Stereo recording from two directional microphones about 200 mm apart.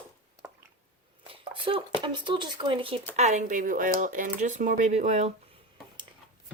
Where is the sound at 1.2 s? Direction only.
25° right (ahead or behind).